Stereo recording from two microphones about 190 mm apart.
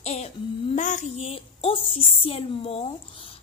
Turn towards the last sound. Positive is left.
turn(degrees=30)  # may be behind; listen again after turning